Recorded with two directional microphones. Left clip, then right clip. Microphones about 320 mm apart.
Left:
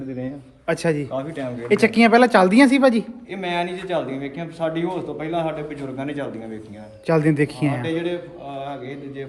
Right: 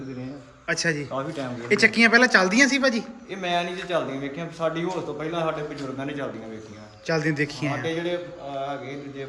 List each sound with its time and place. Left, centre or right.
0.7 s speech: centre
3.3 s a man's voice: centre
7.1 s speech: centre
7.9 s a man's voice: centre